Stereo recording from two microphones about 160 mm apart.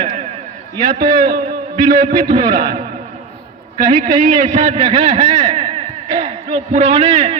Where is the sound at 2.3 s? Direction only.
50° right (ahead or behind).